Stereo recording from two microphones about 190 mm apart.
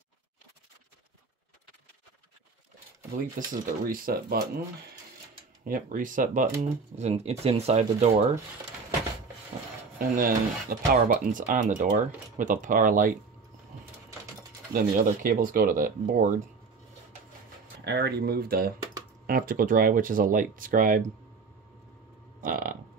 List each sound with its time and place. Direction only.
3.3 s speech: 45° right (ahead or behind)
5.7 s speech: 45° right (ahead or behind)
9.9 s speech: 50° right (ahead or behind)
14.7 s speech: 50° right (ahead or behind)
17.8 s speech: 60° right (ahead or behind)
22.4 s burping: 45° right (ahead or behind)